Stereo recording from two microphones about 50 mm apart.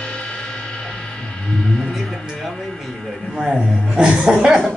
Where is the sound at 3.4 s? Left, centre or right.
Centre.